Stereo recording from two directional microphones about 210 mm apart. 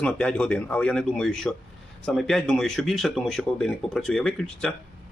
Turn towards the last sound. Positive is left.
turn(degrees=5)  # may be behind; listen again after turning